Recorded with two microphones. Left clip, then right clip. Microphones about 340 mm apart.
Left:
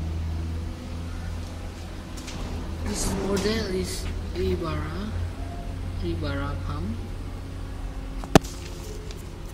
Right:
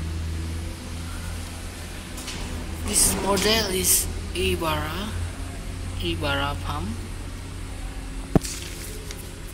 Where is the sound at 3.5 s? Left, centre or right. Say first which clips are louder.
Right 6 dB; centre.